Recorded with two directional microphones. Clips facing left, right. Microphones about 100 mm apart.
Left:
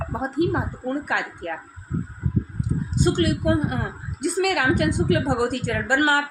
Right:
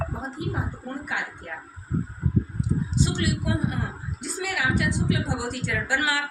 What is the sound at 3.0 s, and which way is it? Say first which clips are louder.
A woman's voice: left 8 dB; 50° left (ahead or behind).